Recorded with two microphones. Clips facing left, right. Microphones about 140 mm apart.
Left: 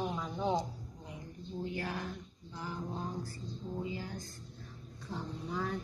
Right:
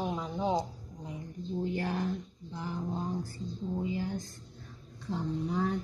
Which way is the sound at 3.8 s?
30° right (ahead or behind).